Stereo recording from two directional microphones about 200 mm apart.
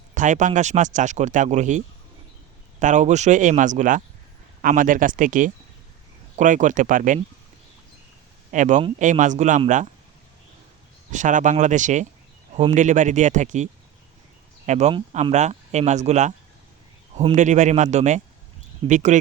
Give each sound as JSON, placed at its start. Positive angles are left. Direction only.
{"t": 0.1, "sound": "speech", "side_deg": -40}
{"t": 2.8, "sound": "speech", "side_deg": -35}
{"t": 8.5, "sound": "speech", "side_deg": -40}
{"t": 11.1, "sound": "speech", "side_deg": -40}
{"t": 14.7, "sound": "speech", "side_deg": -35}